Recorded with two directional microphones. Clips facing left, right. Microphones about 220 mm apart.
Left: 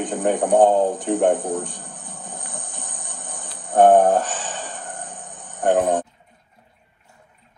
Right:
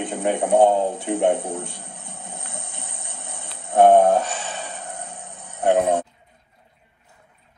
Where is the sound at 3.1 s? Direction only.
10° right (ahead or behind).